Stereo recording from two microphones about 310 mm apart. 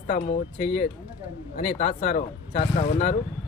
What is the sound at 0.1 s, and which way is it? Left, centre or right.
Speech, left.